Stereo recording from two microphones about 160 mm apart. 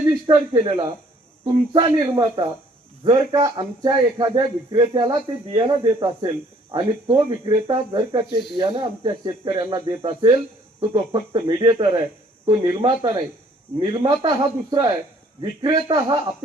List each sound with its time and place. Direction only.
0.3 s a man's voice: 30° right (ahead or behind)